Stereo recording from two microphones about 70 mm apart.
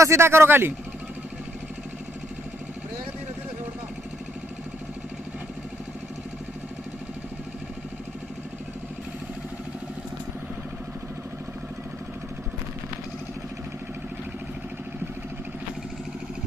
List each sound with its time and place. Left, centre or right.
0.0 s speech: right